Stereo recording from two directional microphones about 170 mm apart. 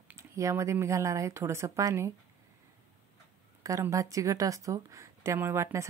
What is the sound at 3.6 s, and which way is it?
A woman's voice, 20° right (ahead or behind).